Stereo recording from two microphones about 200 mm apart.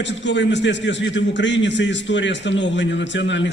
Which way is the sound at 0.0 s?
65° left (ahead or behind).